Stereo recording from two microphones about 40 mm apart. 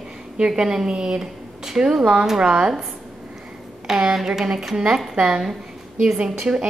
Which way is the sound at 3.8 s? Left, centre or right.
Centre.